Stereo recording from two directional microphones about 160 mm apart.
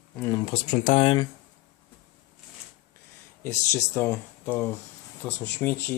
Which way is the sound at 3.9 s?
15° left (ahead or behind).